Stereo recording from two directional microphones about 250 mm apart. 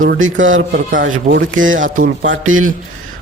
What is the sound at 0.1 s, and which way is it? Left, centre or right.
Speech, right.